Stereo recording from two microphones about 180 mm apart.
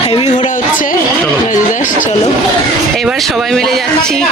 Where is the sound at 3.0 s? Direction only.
Centre (ahead or behind).